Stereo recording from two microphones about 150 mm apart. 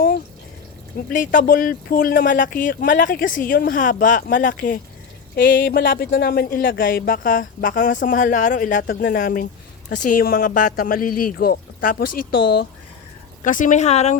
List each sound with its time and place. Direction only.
1.1 s speech: 60° left (ahead or behind); by 12.6 s 85° left
13.4 s speech: 60° left (ahead or behind)